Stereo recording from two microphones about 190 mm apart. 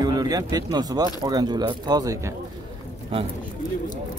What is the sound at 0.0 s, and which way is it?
Speech, 20° right (ahead or behind).